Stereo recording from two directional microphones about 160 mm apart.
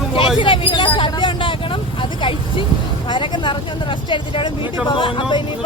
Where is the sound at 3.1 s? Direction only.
30° left (ahead or behind).